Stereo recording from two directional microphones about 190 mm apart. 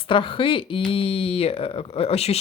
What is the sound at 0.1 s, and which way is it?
Speech, 25° left (ahead or behind).